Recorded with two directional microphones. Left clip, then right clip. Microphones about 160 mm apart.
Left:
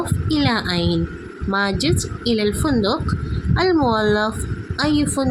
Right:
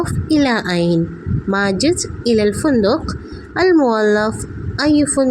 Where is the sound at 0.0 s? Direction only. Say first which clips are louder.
Right 5 dB; 20° right (ahead or behind).